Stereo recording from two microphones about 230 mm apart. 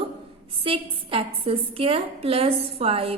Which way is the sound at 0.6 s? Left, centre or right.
Right.